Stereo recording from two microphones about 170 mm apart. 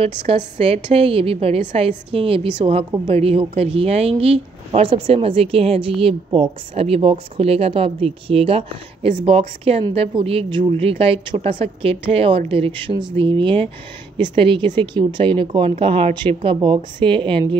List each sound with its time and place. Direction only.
0.0 s a woman's voice: 35° right (ahead or behind)